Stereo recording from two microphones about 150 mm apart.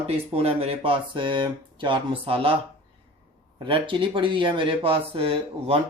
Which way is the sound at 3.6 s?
35° right (ahead or behind).